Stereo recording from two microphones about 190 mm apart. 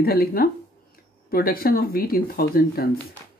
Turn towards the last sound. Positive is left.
turn(degrees=55)  # may be behind; listen again after turning